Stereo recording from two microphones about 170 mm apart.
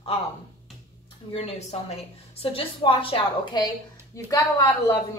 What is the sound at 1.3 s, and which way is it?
A woman's voice, 40° left (ahead or behind).